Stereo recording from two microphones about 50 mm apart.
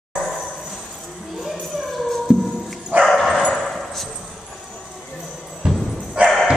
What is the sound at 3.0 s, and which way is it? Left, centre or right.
Dog, centre.